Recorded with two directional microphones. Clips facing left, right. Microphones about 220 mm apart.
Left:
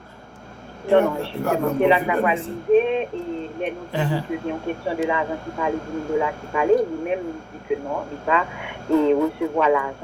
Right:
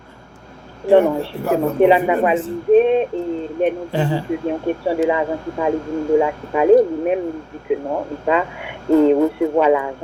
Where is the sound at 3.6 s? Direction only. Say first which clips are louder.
Right 8 dB; 30° right (ahead or behind).